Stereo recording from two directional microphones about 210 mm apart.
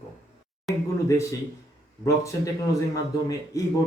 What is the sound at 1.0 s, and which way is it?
Speech, 15° left (ahead or behind).